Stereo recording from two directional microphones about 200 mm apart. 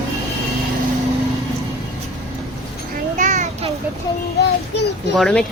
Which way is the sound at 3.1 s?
35° right (ahead or behind).